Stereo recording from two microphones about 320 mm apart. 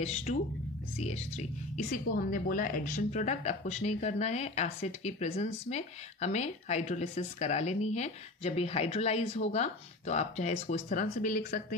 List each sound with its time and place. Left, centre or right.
0.0 s a woman's voice: left